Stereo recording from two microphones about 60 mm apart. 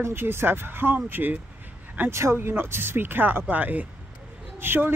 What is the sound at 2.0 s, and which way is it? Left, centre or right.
Speech, right.